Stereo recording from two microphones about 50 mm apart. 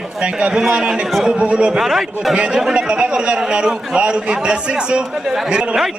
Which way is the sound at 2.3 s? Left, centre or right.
Centre.